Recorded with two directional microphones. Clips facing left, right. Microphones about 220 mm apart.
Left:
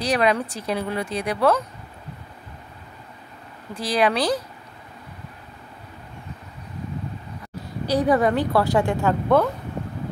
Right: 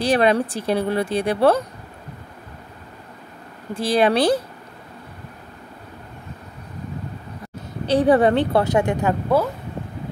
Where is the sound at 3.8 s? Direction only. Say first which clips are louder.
Right 4 dB; 25° right (ahead or behind).